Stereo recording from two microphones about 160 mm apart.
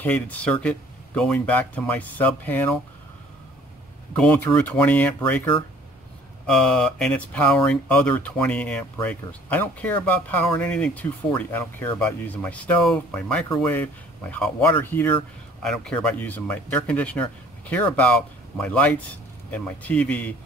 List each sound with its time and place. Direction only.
0.0 s speech: 10° left (ahead or behind)
4.1 s speech: 10° left (ahead or behind)